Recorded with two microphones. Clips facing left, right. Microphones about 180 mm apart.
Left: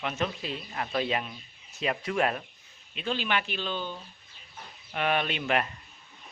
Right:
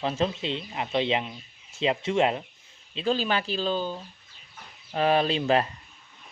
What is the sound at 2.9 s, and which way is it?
Speech, 35° right (ahead or behind).